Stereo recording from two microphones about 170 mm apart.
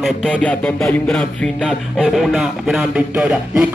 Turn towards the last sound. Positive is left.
turn(degrees=-5)  # may be behind; listen again after turning